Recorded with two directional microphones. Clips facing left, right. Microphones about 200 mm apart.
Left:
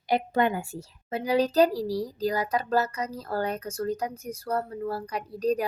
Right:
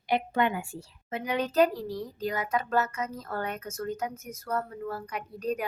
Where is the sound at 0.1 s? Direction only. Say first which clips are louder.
Left 2 dB; 40° left (ahead or behind).